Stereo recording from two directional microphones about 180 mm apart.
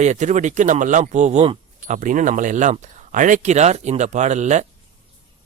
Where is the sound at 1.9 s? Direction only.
45° right (ahead or behind).